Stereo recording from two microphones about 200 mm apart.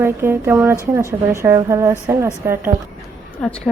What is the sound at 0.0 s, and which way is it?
Speech, 10° right (ahead or behind).